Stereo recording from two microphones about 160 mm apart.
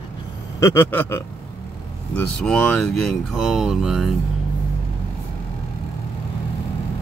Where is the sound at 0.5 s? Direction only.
15° left (ahead or behind); by 4.1 s centre (ahead or behind).